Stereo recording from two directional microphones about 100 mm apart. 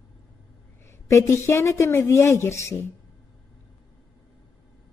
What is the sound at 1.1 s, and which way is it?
A woman's voice, 30° left (ahead or behind).